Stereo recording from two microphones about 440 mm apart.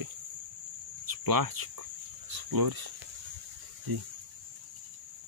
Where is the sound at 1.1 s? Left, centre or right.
Right.